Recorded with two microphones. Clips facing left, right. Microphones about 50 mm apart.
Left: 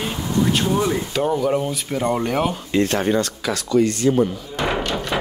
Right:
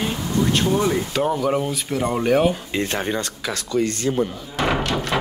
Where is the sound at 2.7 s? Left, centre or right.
Right.